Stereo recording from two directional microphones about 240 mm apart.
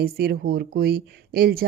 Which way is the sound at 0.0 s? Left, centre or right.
Right.